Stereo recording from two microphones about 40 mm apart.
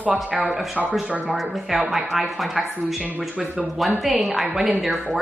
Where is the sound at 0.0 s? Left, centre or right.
Right.